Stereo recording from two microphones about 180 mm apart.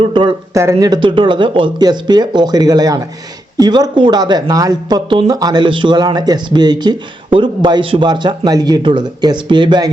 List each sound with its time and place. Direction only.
0.0 s speech: 25° right (ahead or behind)
0.5 s speech: 15° right (ahead or behind)